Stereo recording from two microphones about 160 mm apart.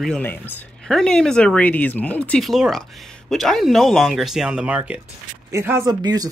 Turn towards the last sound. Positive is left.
turn(degrees=-25)  # may be behind; listen again after turning